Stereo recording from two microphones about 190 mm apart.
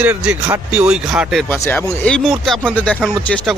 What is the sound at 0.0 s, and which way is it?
Speech, 5° right (ahead or behind).